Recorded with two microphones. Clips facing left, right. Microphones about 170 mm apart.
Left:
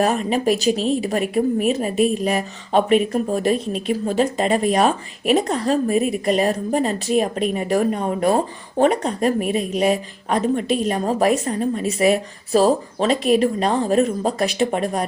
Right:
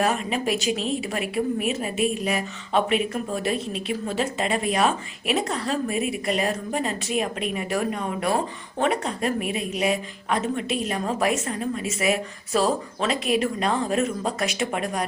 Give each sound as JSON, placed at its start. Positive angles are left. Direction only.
{"t": 0.0, "sound": "a woman's voice", "side_deg": 40}